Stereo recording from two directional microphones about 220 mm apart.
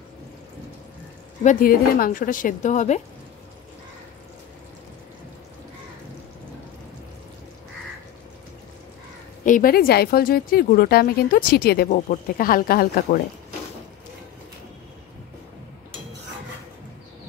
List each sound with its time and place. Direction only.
1.4 s speech: 40° left (ahead or behind)
9.4 s speech: 40° left (ahead or behind)